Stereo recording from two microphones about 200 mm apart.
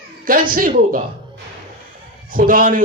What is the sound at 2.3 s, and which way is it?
Speech, 45° right (ahead or behind).